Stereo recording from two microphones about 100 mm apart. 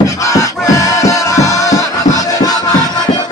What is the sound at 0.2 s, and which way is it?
Music, 35° left (ahead or behind).